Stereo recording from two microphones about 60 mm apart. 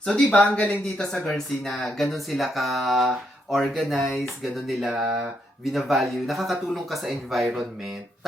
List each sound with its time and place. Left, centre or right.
0.0 s speech: centre
0.3 s speech: left
0.9 s speech: centre